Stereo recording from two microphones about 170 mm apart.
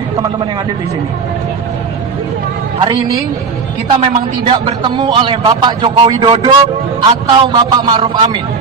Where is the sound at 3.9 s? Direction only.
30° right (ahead or behind).